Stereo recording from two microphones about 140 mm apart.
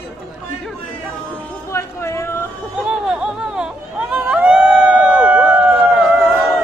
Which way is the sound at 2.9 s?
5° right (ahead or behind).